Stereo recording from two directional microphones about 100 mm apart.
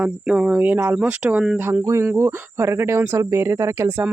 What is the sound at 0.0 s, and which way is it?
A woman's voice, 10° right (ahead or behind).